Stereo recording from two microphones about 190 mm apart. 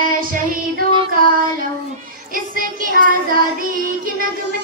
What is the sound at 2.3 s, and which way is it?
Child singing, 45° right (ahead or behind).